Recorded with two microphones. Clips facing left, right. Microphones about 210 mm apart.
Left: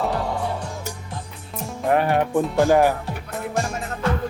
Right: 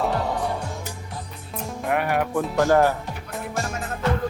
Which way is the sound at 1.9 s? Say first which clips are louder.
Left 4 dB; 30° left (ahead or behind).